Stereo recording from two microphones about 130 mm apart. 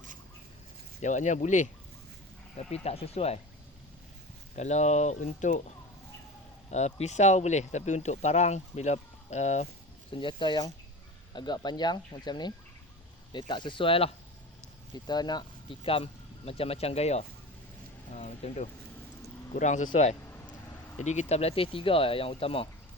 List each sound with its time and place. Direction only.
1.0 s speech: 70° left (ahead or behind)
2.6 s speech: 55° left (ahead or behind)
4.5 s speech: 60° left (ahead or behind)
6.7 s speech: 60° left (ahead or behind)
10.1 s speech: 40° left (ahead or behind)
14.9 s speech: 35° left (ahead or behind); by 18.7 s 60° left (ahead or behind)
19.5 s speech: 75° left (ahead or behind)
21.0 s speech: 60° left (ahead or behind)